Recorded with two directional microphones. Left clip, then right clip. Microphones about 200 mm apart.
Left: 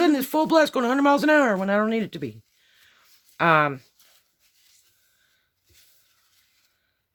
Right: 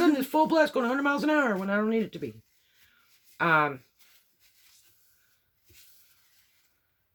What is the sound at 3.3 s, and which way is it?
Speech, 60° left (ahead or behind).